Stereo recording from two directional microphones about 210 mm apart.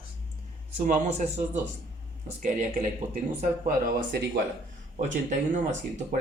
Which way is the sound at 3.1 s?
40° right (ahead or behind).